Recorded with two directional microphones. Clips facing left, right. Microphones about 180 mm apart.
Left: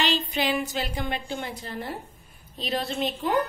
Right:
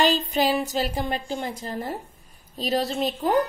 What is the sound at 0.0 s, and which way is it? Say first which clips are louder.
A woman's voice: right 5 dB; 45° right (ahead or behind).